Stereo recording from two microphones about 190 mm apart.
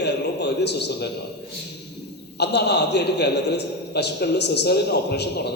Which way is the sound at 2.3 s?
60° left (ahead or behind).